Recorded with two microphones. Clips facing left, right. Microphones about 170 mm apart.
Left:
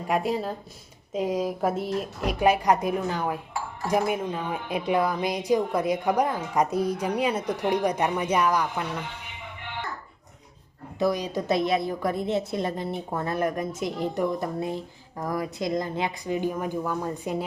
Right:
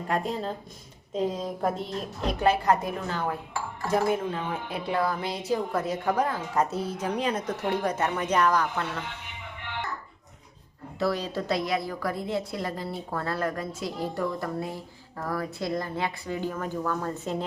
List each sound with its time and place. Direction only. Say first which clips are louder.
0.1 s speech: left 3 dB; 10° left (ahead or behind)
11.0 s a woman's voice: left 3 dB; 15° left (ahead or behind)